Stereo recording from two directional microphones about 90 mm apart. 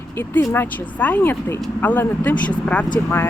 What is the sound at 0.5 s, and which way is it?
Speech, 20° left (ahead or behind).